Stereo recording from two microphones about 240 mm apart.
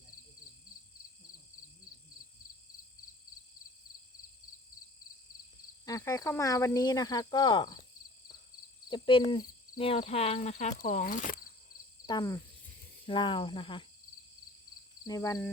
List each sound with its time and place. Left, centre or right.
5.8 s speech: centre
8.9 s speech: left
12.0 s speech: centre
15.0 s speech: centre